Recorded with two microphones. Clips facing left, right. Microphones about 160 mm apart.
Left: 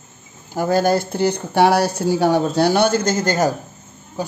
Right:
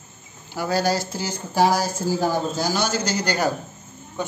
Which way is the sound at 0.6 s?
50° left (ahead or behind).